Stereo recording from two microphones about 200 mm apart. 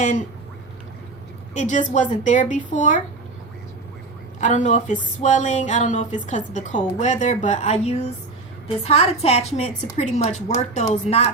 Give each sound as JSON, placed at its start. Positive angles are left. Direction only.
{"t": 1.5, "sound": "speech", "side_deg": 35}
{"t": 4.4, "sound": "speech", "side_deg": 40}